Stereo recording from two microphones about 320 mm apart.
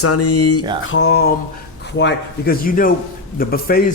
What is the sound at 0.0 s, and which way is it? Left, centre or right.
Speech, left.